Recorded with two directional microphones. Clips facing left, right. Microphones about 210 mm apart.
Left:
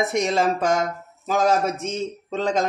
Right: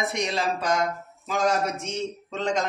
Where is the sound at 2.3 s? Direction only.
35° left (ahead or behind).